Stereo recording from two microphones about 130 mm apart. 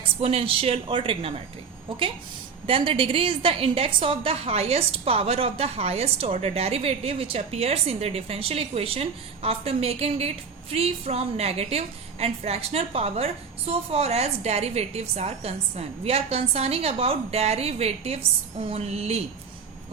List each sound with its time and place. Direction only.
0.2 s a woman's voice: 50° right (ahead or behind)